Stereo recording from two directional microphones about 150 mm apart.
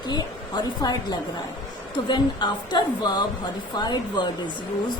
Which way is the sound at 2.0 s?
30° left (ahead or behind).